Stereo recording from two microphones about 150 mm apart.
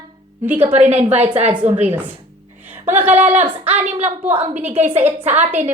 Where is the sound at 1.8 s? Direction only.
10° right (ahead or behind).